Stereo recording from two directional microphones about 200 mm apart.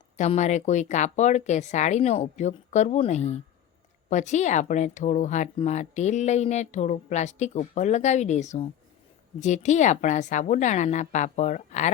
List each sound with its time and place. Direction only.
0.2 s a woman's voice: 35° left (ahead or behind)